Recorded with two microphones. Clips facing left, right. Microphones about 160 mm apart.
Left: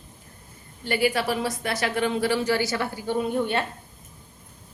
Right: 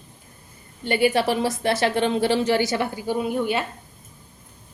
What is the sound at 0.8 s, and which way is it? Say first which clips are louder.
A woman's voice: right 4 dB; 25° right (ahead or behind).